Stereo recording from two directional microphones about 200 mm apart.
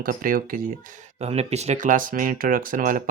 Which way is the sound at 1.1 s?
30° right (ahead or behind).